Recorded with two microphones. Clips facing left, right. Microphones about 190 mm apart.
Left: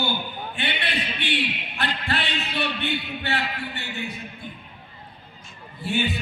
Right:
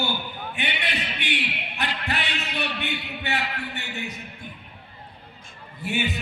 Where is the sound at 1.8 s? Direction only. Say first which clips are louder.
Left 2 dB; 15° right (ahead or behind).